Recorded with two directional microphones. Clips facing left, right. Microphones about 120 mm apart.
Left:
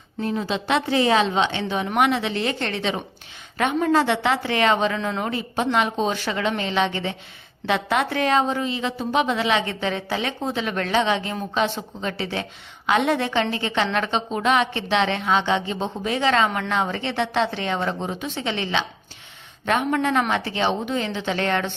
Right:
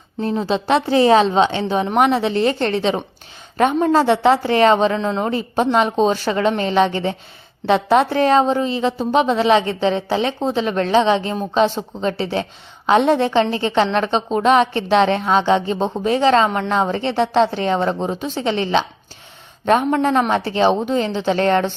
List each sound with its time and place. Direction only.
0.2 s a woman's voice: 35° right (ahead or behind)